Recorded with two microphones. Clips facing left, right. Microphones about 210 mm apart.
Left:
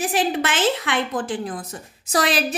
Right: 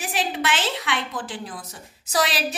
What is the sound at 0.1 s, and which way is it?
A woman's voice, 45° left (ahead or behind).